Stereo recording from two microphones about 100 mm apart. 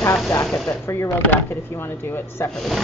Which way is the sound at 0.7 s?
30° left (ahead or behind).